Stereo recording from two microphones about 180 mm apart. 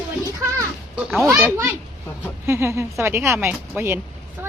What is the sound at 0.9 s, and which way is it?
Speech, centre (ahead or behind).